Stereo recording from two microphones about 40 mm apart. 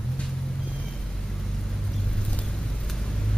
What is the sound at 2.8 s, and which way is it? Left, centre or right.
Vehicle, centre.